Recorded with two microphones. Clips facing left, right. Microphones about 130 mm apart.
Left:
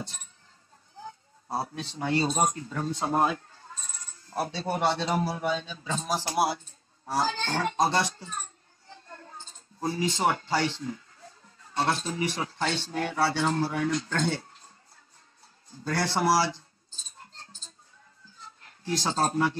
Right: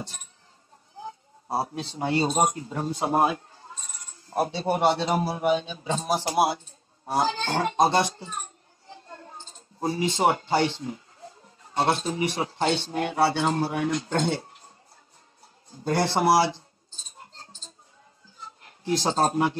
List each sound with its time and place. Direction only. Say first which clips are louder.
1.0 s speech: right 4 dB; 25° right (ahead or behind)
8.2 s a sound: right 2 dB; 20° right (ahead or behind)
9.8 s speech: right 3 dB; 20° right (ahead or behind)
15.7 s speech: right 4 dB; 20° right (ahead or behind)
18.6 s speech: right 4 dB; 20° right (ahead or behind)